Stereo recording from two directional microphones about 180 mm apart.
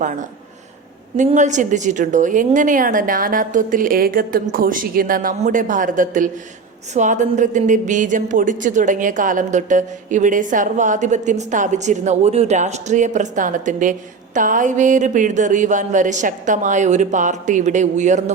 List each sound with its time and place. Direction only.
1.1 s a woman's voice: 40° right (ahead or behind)